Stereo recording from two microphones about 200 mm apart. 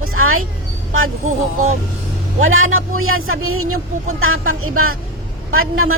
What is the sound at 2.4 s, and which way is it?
A man's voice, 90° right.